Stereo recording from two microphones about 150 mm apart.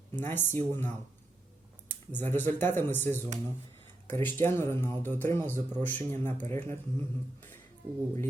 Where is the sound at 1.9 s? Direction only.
15° left (ahead or behind).